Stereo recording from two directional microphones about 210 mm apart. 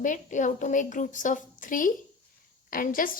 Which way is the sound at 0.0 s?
35° left (ahead or behind).